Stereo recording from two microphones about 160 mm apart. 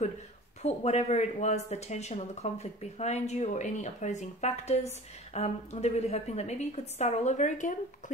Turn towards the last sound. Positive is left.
turn(degrees=50)  # may be behind; listen again after turning